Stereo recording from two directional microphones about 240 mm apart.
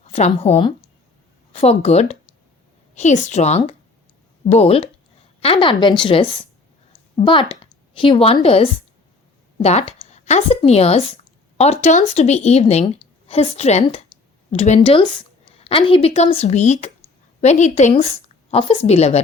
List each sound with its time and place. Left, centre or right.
0.1 s a woman's voice: left
7.9 s a woman's voice: left